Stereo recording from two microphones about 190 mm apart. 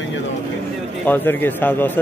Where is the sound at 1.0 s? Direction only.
10° left (ahead or behind).